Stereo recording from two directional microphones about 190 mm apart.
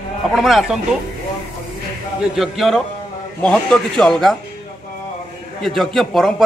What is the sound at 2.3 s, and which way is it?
A man's voice, centre (ahead or behind).